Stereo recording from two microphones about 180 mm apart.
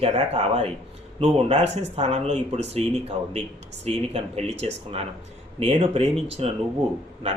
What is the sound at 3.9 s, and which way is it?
Speech, 35° right (ahead or behind).